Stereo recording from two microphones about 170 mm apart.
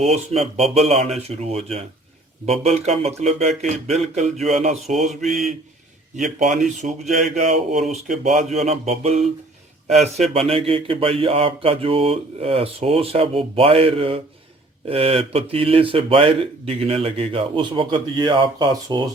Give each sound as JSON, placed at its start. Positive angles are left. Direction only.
{"t": 0.0, "sound": "a man's voice", "side_deg": -40}
{"t": 5.2, "sound": "mantra", "side_deg": 0}
{"t": 6.1, "sound": "a man's voice", "side_deg": -45}